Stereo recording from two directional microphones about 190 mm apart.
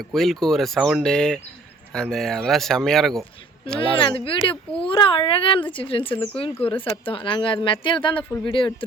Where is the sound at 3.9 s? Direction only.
25° left (ahead or behind).